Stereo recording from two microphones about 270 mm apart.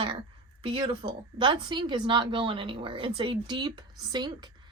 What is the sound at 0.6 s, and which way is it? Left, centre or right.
A woman's voice, centre.